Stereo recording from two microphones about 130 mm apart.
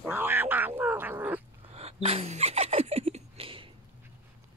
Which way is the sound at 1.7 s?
55° right (ahead or behind).